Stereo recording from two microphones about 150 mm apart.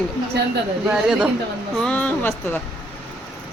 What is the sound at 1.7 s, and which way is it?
Speech, 5° left (ahead or behind).